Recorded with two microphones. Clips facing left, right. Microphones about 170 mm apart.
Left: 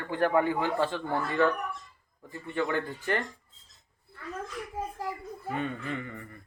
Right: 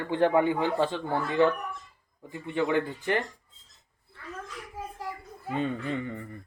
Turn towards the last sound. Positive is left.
turn(degrees=-25)  # may be behind; listen again after turning